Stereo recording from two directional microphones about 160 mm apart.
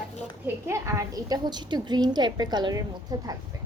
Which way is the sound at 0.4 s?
15° right (ahead or behind).